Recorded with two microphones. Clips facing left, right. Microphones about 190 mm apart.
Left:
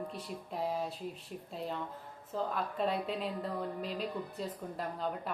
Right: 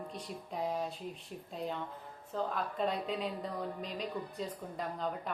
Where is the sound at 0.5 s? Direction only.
5° left (ahead or behind).